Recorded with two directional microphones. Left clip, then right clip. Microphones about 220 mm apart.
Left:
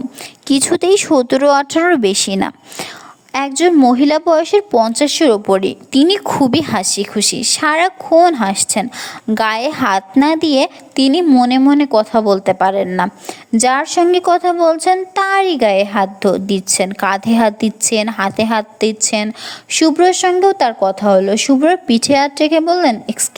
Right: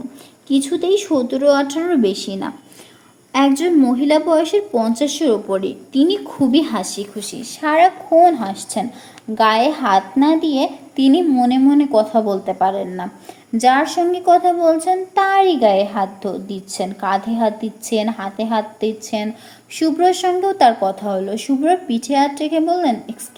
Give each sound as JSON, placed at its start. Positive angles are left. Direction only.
{"t": 0.4, "sound": "a woman's voice", "side_deg": 45}